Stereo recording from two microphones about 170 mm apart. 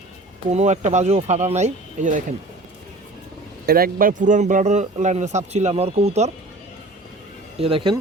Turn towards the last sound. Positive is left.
turn(degrees=-30)  # may be behind; listen again after turning